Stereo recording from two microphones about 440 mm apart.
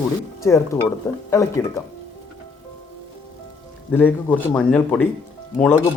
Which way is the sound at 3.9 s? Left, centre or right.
Centre.